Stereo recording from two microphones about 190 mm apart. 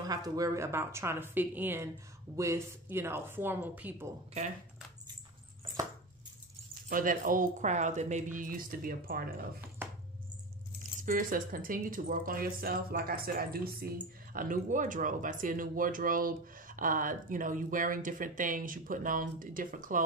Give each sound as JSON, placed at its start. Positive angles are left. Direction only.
{"t": 0.0, "sound": "a woman's voice", "side_deg": -20}
{"t": 6.9, "sound": "speech", "side_deg": -45}
{"t": 10.8, "sound": "speech", "side_deg": -45}